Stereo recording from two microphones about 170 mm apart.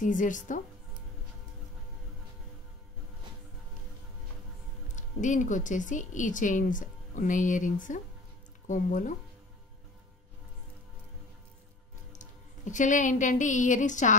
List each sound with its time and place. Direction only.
0.0 s speech: 50° left (ahead or behind)
4.9 s speech: 45° left (ahead or behind)
12.1 s speech: 45° left (ahead or behind)